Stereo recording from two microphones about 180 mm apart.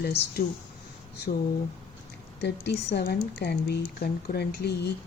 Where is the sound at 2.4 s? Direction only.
70° left (ahead or behind).